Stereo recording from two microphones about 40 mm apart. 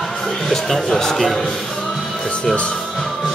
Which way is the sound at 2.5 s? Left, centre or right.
Left.